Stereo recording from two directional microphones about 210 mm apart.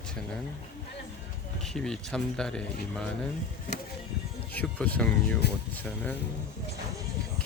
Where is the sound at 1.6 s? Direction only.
5° left (ahead or behind).